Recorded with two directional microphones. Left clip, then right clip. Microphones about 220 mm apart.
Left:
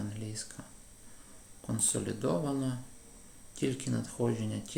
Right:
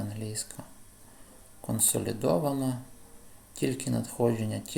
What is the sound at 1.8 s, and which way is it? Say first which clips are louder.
Speech: right 4 dB; 15° right (ahead or behind).